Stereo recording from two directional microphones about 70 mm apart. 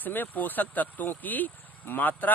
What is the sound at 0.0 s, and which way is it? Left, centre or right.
Speech, left.